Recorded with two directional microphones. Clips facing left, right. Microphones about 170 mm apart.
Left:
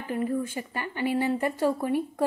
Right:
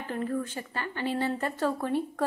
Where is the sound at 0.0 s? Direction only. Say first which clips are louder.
Left 3 dB; 10° left (ahead or behind).